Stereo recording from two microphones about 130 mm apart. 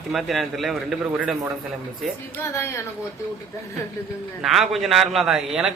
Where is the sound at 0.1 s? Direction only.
Centre (ahead or behind).